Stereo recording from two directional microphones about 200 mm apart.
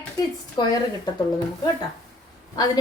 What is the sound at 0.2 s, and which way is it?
Speech, 20° left (ahead or behind).